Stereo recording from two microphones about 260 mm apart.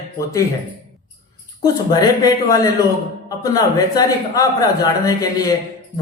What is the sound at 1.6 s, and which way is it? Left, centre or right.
A man's voice, centre.